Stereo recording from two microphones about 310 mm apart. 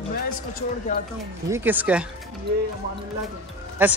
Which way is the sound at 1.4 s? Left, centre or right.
Centre.